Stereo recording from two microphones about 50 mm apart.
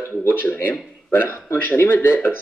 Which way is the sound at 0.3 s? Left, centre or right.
Left.